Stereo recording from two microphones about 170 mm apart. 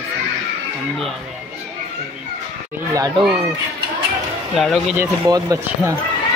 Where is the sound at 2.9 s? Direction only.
25° right (ahead or behind).